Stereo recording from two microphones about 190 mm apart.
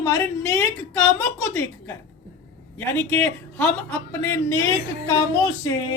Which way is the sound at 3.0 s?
10° left (ahead or behind).